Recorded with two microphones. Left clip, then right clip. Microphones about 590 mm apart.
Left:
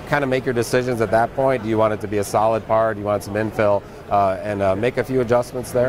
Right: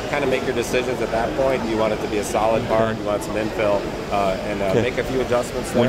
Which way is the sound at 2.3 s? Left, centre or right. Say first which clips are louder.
Left 2 dB; left.